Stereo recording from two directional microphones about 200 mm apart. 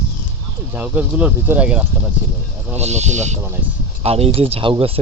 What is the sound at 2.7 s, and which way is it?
Speech, 35° right (ahead or behind).